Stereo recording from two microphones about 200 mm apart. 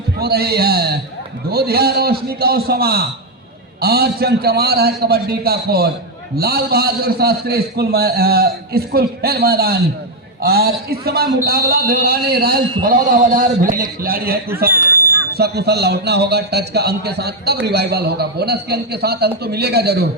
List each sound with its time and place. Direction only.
0.2 s speech: 50° right (ahead or behind)